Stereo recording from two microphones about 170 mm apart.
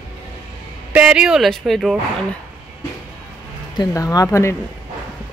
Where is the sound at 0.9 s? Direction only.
5° right (ahead or behind).